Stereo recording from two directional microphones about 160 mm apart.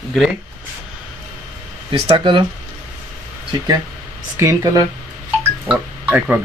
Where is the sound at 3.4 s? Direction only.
25° right (ahead or behind).